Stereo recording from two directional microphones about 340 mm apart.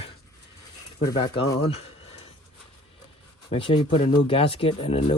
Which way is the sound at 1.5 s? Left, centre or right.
Centre.